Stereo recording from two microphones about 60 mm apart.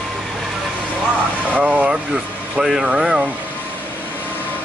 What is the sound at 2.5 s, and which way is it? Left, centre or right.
Speech, centre.